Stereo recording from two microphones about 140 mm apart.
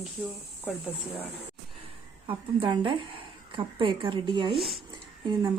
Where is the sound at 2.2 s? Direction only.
35° right (ahead or behind).